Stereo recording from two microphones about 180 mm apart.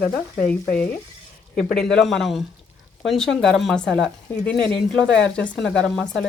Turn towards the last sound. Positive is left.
turn(degrees=0)  # may be behind; listen again after turning